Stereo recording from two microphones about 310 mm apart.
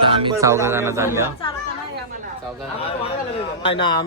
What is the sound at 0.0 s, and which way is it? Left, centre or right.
Speech, centre.